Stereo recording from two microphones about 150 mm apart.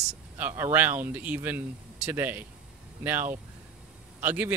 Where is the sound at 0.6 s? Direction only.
15° right (ahead or behind).